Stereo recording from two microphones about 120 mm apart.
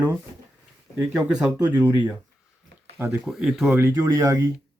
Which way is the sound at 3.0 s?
15° right (ahead or behind).